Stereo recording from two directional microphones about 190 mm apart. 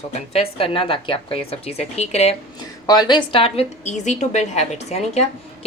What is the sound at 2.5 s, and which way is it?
A woman's voice, 20° left (ahead or behind).